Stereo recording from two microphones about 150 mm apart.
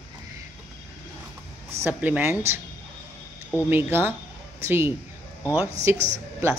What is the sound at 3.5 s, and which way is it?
Speech, 15° right (ahead or behind).